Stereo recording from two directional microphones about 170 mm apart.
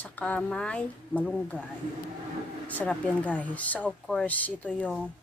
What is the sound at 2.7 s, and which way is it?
Speech, 10° left (ahead or behind).